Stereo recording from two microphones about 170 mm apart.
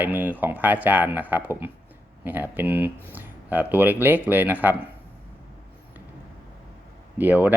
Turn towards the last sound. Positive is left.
turn(degrees=-10)  # may be behind; listen again after turning